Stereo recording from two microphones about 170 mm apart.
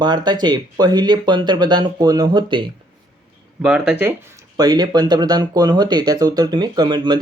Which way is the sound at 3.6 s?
5° right (ahead or behind).